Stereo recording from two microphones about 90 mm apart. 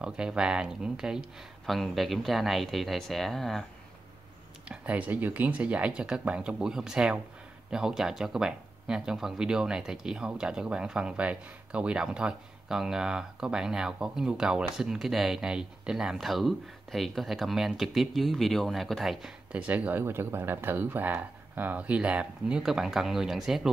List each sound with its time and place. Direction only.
0.0 s speech: 10° right (ahead or behind)
4.6 s speech: 15° right (ahead or behind)
19.5 s speech: 15° right (ahead or behind)